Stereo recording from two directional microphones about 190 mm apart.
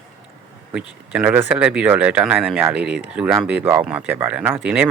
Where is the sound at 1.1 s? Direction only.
10° right (ahead or behind).